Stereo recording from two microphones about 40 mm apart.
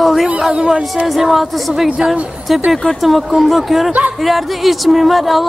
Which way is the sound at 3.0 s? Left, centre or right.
Centre.